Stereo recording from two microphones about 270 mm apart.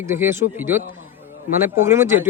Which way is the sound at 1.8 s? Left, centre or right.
Centre.